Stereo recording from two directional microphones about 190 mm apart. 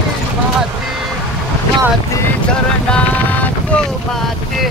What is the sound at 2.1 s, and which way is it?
Boat, 5° left (ahead or behind).